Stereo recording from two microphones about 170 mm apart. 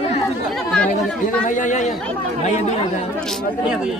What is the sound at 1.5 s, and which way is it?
Speech, 50° left (ahead or behind).